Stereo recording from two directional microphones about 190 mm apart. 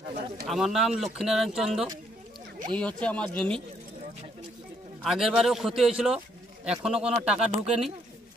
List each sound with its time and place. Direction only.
0.5 s speech: centre (ahead or behind)
2.7 s speech: 5° left (ahead or behind)
5.0 s speech: centre (ahead or behind)
7.4 s speech: 35° right (ahead or behind)